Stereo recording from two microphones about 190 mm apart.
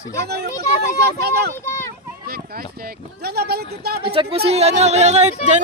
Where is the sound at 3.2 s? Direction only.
55° right (ahead or behind).